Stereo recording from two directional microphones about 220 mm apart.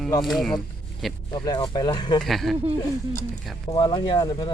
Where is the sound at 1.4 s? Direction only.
20° left (ahead or behind).